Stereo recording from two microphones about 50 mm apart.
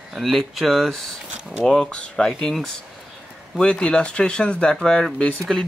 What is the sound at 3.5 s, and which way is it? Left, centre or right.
Speech, centre.